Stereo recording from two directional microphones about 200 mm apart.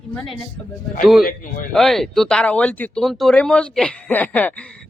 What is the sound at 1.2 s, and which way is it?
Speech, 45° left (ahead or behind).